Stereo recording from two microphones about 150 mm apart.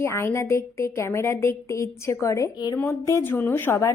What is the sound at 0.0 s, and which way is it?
A woman's voice, 20° left (ahead or behind).